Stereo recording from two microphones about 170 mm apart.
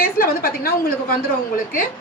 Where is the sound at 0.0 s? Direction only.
60° left (ahead or behind).